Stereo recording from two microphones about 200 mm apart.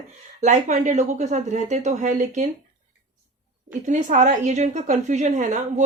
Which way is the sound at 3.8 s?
40° right (ahead or behind).